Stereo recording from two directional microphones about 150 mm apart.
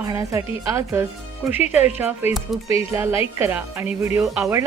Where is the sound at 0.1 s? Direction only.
20° right (ahead or behind).